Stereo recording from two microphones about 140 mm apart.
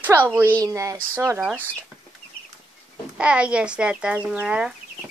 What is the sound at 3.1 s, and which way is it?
A child's voice, 5° right (ahead or behind).